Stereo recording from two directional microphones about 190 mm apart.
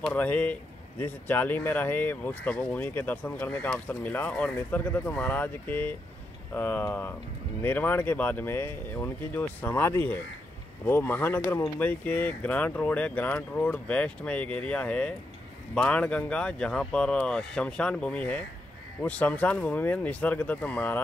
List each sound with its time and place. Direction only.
0.0 s speech: 10° left (ahead or behind)